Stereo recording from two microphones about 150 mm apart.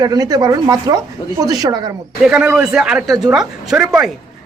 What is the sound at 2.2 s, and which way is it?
A woman's voice, 10° right (ahead or behind).